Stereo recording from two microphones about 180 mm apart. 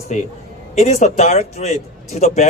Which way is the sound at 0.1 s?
40° left (ahead or behind).